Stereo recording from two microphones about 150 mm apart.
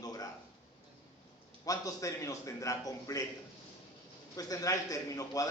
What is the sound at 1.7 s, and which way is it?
A man's voice, 20° left (ahead or behind).